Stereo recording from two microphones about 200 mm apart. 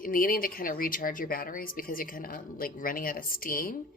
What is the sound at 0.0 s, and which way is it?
A woman's voice, 45° left (ahead or behind).